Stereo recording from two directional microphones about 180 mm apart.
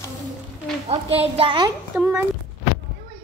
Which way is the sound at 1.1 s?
35° right (ahead or behind).